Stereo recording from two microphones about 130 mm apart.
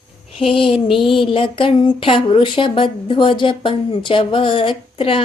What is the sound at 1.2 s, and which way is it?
Speech, 40° left (ahead or behind).